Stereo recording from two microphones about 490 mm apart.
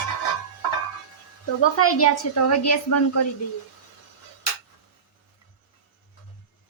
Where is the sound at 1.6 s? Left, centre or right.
Left.